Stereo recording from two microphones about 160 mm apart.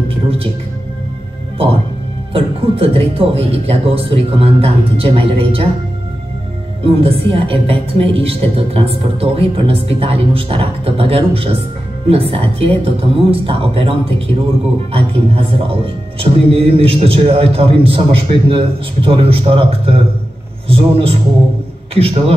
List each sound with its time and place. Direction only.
0.1 s music: 35° right (ahead or behind)
2.3 s a man's voice: 35° right (ahead or behind)
6.8 s a man's voice: 35° right (ahead or behind)